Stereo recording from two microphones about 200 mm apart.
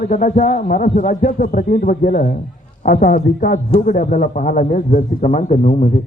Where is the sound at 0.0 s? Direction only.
40° left (ahead or behind).